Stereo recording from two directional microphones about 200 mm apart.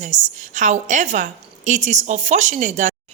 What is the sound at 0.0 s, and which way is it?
A woman's voice, 40° right (ahead or behind).